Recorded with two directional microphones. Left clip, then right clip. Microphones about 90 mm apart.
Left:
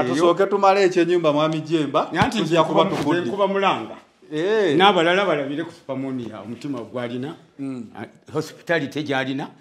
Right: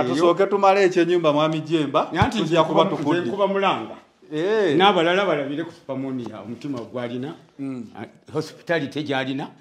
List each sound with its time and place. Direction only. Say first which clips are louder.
0.0 s a man's voice: even; 30° left (ahead or behind)